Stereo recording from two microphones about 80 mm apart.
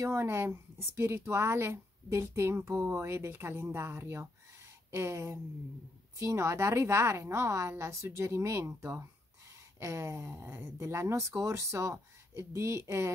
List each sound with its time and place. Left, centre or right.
0.0 s speech: right